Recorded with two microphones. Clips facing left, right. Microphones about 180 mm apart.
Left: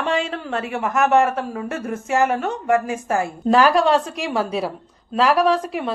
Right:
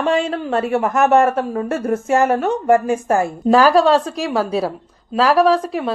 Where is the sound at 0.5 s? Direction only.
40° right (ahead or behind).